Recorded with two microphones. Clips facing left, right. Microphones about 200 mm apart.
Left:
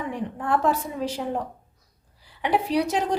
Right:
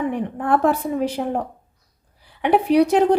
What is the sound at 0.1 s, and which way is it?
A woman's voice, 60° right (ahead or behind).